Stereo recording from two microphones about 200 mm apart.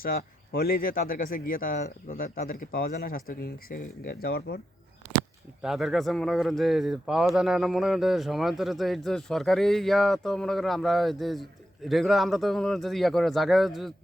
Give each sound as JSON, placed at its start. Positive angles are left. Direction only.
{"t": 0.0, "sound": "speech", "side_deg": 50}
{"t": 5.6, "sound": "speech", "side_deg": 0}